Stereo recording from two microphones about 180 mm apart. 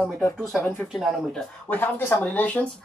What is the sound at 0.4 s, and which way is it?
Speech, 5° right (ahead or behind).